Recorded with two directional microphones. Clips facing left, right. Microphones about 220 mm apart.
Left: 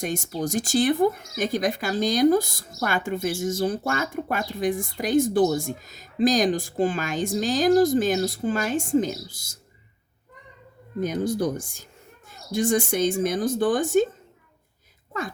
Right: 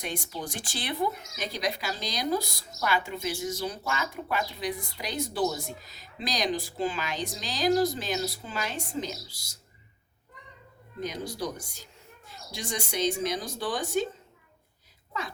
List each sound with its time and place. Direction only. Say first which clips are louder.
0.0 s speech: left 8 dB; 45° left (ahead or behind)
11.0 s speech: left 9 dB; 50° left (ahead or behind)